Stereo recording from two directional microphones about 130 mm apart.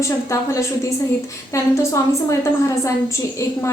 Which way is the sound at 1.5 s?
20° left (ahead or behind).